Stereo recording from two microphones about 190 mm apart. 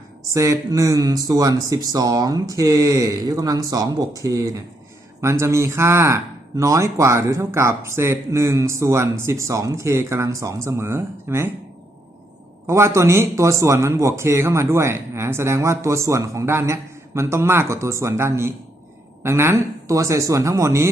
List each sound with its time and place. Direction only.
0.3 s speech: 15° right (ahead or behind)
12.6 s speech: 15° right (ahead or behind)